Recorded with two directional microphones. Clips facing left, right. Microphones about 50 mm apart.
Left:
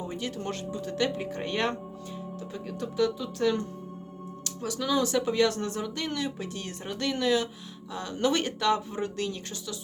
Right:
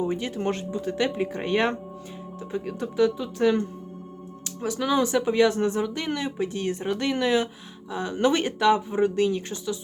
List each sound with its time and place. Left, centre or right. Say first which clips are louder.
0.0 s speech: right 7 dB; right